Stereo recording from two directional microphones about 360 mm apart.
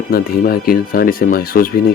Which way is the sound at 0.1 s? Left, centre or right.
Left.